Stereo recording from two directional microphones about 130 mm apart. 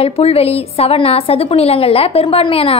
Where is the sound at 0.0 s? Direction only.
50° left (ahead or behind).